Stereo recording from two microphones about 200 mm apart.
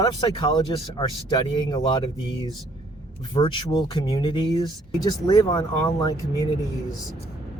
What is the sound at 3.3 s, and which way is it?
Speech, 25° left (ahead or behind).